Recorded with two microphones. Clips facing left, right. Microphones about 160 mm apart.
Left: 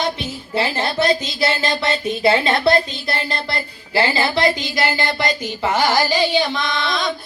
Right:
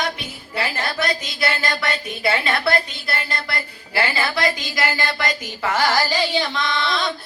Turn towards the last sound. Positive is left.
turn(degrees=15)  # may be behind; listen again after turning